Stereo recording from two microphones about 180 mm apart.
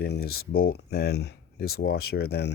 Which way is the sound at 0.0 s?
65° left (ahead or behind).